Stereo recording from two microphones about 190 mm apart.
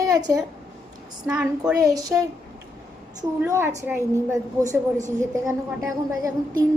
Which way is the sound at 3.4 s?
10° right (ahead or behind).